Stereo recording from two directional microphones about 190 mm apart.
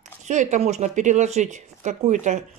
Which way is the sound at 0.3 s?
40° right (ahead or behind).